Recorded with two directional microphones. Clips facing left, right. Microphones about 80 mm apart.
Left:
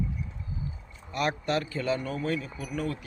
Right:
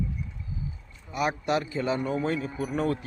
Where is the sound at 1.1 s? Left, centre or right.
Centre; by 3.0 s right.